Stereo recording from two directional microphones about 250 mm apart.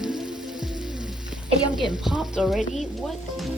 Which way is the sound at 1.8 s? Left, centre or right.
Centre.